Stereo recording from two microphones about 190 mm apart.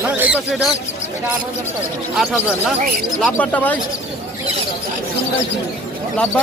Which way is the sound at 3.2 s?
10° left (ahead or behind).